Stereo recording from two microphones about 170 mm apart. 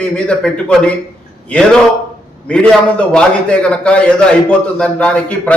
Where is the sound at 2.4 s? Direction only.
5° left (ahead or behind).